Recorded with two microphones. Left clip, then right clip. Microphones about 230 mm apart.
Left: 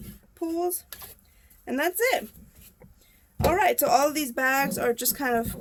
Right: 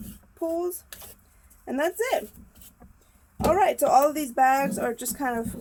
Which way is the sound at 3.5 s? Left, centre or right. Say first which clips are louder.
Right 2 dB; left.